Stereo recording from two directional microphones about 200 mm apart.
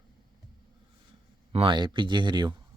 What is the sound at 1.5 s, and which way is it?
Speech, 25° right (ahead or behind).